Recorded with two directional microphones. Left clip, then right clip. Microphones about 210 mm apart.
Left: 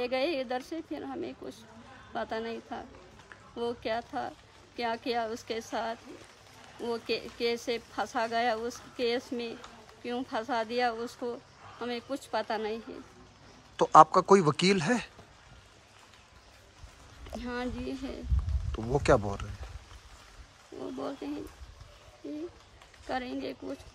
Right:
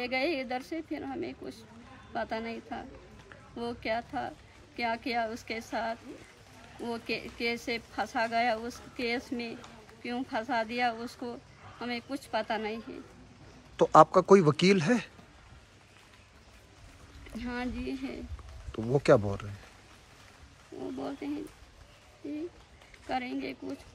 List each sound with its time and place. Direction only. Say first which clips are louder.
0.0 s speech: left 1 dB; 15° left (ahead or behind)
17.4 s speech: even; 15° left (ahead or behind)
20.8 s speech: even; 20° left (ahead or behind)
23.0 s speech: right 1 dB; 15° left (ahead or behind)